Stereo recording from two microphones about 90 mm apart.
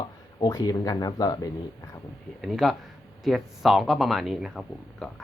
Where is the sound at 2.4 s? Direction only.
Centre (ahead or behind).